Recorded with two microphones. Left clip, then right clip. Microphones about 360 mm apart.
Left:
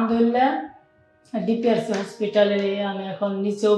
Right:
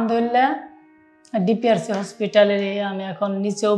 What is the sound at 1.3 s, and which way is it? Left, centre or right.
A woman's voice, right.